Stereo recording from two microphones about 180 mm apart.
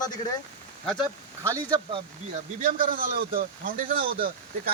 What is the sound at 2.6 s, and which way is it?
Speech, 50° right (ahead or behind).